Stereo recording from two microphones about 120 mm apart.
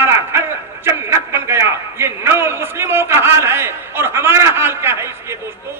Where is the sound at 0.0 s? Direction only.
20° right (ahead or behind).